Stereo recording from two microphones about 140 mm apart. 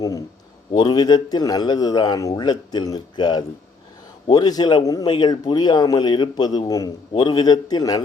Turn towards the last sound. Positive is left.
turn(degrees=25)  # may be behind; listen again after turning